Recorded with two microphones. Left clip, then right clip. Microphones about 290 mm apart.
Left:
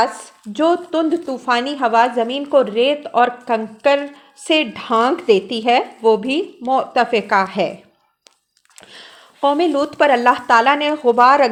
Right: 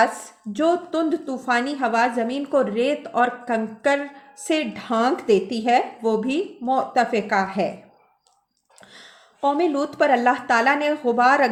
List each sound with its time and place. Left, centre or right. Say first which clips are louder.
0.0 s a woman's voice: left 2 dB; centre
8.9 s speech: left 6 dB; left